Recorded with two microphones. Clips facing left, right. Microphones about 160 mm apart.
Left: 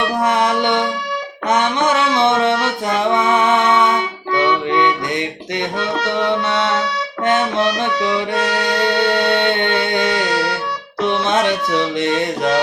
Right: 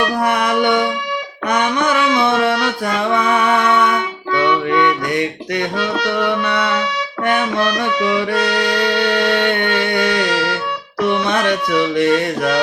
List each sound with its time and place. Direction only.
0.0 s music: 25° left (ahead or behind)